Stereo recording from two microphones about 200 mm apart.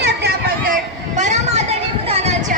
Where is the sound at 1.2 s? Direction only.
35° right (ahead or behind).